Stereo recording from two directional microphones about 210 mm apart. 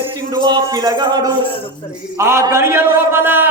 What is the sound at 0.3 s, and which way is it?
A man's voice, 20° right (ahead or behind).